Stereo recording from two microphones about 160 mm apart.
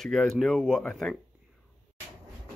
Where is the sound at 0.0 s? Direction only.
5° left (ahead or behind).